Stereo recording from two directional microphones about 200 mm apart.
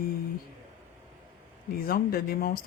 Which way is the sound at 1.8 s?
50° left (ahead or behind).